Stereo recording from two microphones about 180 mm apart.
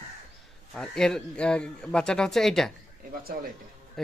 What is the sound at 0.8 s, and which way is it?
A man's voice, 5° left (ahead or behind).